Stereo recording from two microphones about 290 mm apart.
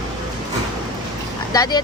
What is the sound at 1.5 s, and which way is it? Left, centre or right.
Speech, centre.